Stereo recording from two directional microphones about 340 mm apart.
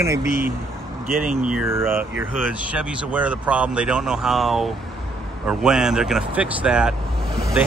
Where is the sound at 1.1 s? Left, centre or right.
Right.